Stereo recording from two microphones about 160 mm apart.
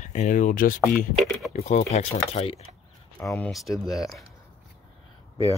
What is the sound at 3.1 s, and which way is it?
Speech, 15° left (ahead or behind).